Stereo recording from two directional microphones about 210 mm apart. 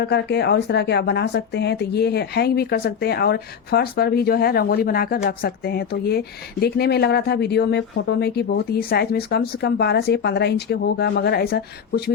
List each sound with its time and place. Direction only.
0.0 s speech: 55° left (ahead or behind)